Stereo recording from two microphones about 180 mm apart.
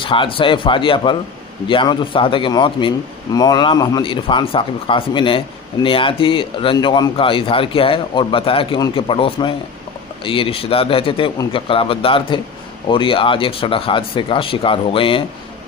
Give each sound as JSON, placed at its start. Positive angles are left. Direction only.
{"t": 0.0, "sound": "speech", "side_deg": 30}